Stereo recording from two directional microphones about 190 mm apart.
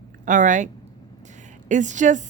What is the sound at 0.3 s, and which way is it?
Speech, 40° right (ahead or behind).